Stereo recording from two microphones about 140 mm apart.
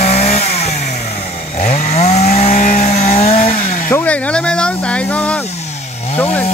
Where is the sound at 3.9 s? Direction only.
10° left (ahead or behind).